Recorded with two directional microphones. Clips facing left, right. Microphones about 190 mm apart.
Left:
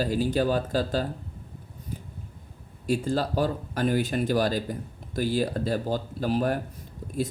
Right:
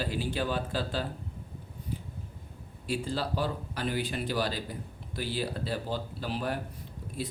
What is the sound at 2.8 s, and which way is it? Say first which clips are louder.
Speech: left 6 dB; 45° left (ahead or behind).